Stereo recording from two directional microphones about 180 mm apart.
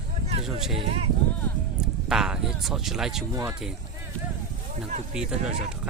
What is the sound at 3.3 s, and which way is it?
Speech, 15° right (ahead or behind).